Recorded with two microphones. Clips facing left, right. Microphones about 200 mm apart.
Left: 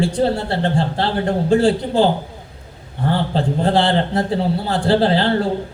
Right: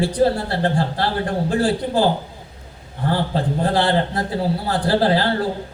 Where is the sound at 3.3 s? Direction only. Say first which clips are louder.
Left 4 dB; 25° left (ahead or behind).